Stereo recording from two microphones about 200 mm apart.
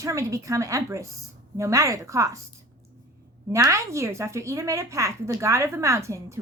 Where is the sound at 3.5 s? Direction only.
15° right (ahead or behind).